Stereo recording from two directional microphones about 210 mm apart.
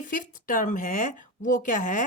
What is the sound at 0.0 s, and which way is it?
Speech, 40° left (ahead or behind).